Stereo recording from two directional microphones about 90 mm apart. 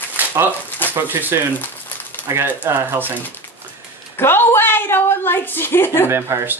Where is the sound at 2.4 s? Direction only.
20° right (ahead or behind).